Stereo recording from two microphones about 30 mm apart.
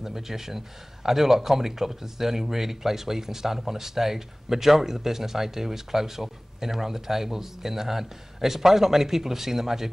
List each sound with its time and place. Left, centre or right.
0.0 s speech: centre